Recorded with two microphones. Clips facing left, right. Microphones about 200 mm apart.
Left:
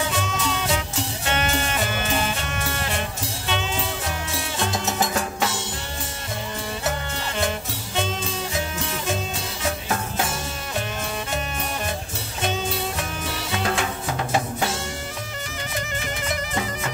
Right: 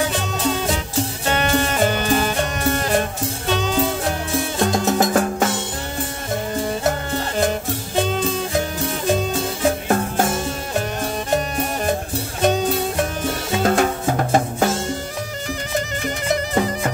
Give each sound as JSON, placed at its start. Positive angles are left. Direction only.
{"t": 1.2, "sound": "music", "side_deg": -35}
{"t": 11.2, "sound": "music", "side_deg": -40}
{"t": 16.5, "sound": "bagpipes", "side_deg": -45}